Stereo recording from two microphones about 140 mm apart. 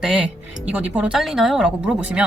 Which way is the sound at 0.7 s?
10° right (ahead or behind).